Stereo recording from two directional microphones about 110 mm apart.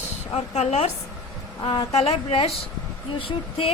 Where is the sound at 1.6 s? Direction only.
45° left (ahead or behind).